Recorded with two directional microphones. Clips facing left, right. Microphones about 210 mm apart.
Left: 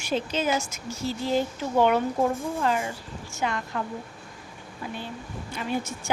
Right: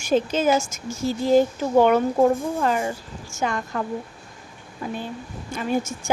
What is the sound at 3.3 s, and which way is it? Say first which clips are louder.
Speech: right 3 dB; 45° right (ahead or behind).